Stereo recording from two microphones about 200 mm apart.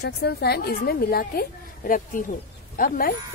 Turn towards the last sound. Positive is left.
turn(degrees=50)  # may be behind; listen again after turning